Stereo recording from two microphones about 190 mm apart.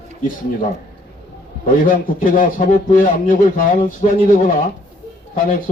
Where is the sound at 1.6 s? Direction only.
45° left (ahead or behind).